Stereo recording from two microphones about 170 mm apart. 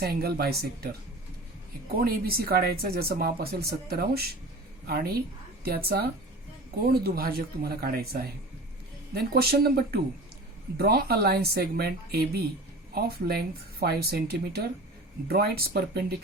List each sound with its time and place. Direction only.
0.0 s speech: 65° right (ahead or behind)
1.9 s speech: 60° right (ahead or behind)